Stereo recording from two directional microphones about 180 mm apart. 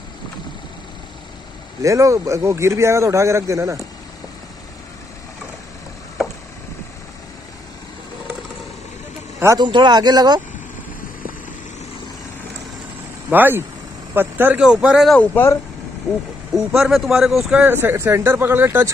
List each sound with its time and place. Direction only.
1.8 s a man's voice: 15° right (ahead or behind)
9.4 s speech: 20° right (ahead or behind)
13.3 s a man's voice: 10° right (ahead or behind)
15.1 s speech: 10° left (ahead or behind)
16.5 s a man's voice: centre (ahead or behind)